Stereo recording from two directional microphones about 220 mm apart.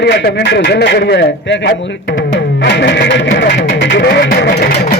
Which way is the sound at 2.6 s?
50° left (ahead or behind).